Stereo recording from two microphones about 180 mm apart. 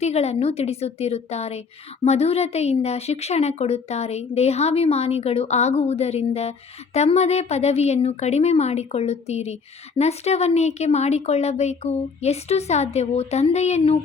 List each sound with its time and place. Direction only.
0.0 s speech: 35° left (ahead or behind)